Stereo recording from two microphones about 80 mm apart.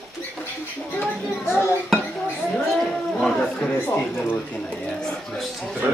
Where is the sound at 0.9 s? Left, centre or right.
Left.